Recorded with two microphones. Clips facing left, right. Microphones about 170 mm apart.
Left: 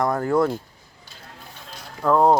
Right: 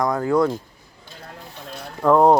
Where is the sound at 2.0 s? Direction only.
10° right (ahead or behind).